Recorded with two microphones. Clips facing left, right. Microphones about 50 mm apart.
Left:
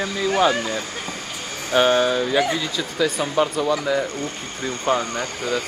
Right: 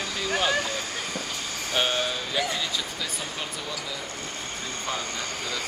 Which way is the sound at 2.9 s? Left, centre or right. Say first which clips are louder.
Left 13 dB; left.